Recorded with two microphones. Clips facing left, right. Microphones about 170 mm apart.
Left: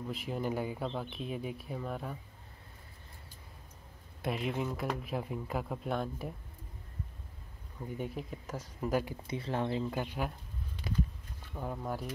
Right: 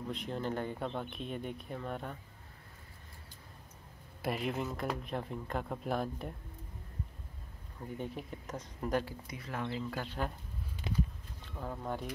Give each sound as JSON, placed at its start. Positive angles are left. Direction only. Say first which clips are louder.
{"t": 0.1, "sound": "speech", "louder": "left 2 dB", "side_deg": 5}
{"t": 4.2, "sound": "speech", "louder": "left 1 dB", "side_deg": 0}
{"t": 8.0, "sound": "speech", "louder": "left 2 dB", "side_deg": 5}
{"t": 9.0, "sound": "speech", "louder": "left 6 dB", "side_deg": 30}
{"t": 11.5, "sound": "speech", "louder": "left 2 dB", "side_deg": 15}
{"t": 11.8, "sound": "speech", "louder": "right 1 dB", "side_deg": 5}